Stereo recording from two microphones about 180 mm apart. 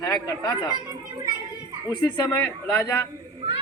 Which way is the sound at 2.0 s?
20° left (ahead or behind).